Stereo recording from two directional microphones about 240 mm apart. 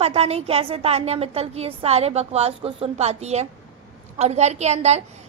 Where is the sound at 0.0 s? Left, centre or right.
Right.